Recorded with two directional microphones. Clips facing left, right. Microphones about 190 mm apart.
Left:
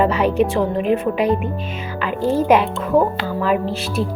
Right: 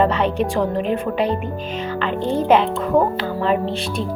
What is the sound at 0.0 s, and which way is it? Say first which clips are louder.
A woman's voice: left 2 dB; 10° left (ahead or behind).